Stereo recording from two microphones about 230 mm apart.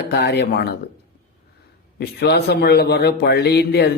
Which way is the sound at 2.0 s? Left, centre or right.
Left.